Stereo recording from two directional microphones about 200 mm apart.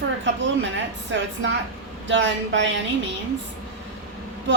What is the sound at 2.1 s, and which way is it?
Speech, 65° right (ahead or behind).